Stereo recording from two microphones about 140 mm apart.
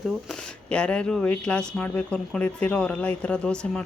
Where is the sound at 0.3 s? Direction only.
5° left (ahead or behind).